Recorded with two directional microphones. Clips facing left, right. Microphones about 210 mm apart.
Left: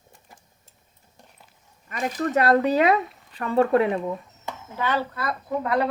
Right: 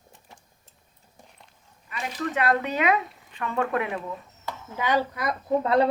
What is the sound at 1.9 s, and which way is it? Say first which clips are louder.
Speech: left 5 dB; 45° left (ahead or behind).